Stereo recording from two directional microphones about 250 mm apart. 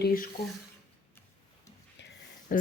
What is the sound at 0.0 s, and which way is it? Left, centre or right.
Speech, left.